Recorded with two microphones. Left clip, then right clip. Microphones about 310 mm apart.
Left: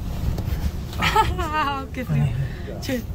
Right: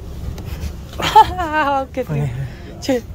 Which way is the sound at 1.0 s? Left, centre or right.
Centre.